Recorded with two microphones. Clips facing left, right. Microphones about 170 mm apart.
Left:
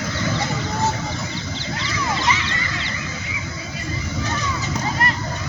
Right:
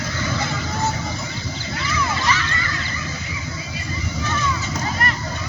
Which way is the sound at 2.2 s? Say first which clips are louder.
Left 1 dB; 20° left (ahead or behind).